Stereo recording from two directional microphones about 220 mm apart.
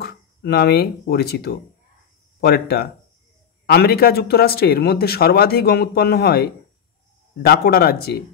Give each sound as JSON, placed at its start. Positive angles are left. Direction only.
{"t": 0.0, "sound": "speech", "side_deg": 45}